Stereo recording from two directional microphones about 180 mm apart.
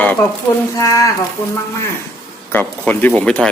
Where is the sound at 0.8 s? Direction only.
20° left (ahead or behind).